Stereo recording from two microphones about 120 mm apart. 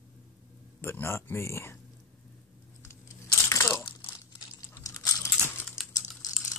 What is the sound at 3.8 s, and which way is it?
Crumpling, 45° left (ahead or behind).